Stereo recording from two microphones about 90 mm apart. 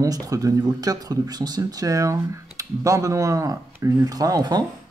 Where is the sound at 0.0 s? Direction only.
40° right (ahead or behind).